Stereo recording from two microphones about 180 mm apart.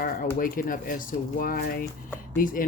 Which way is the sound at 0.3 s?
50° left (ahead or behind).